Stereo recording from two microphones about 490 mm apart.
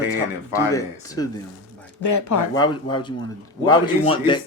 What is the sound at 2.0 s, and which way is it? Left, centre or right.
Speech, left.